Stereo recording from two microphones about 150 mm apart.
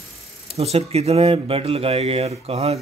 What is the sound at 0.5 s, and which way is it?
Speech, 45° right (ahead or behind).